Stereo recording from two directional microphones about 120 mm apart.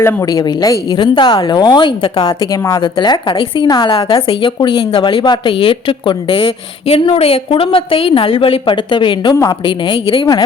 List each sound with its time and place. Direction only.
0.0 s speech: 30° left (ahead or behind); by 2.3 s 45° left (ahead or behind)
2.4 s a woman's voice: 25° left (ahead or behind)
2.8 s a woman's voice: 40° left (ahead or behind)